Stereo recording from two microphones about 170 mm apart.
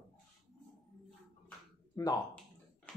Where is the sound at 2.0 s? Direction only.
20° left (ahead or behind).